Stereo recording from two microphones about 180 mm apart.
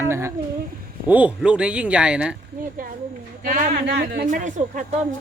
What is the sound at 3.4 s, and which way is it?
Speech, 50° right (ahead or behind).